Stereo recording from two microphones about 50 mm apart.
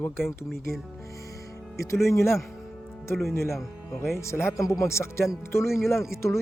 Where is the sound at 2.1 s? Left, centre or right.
Left.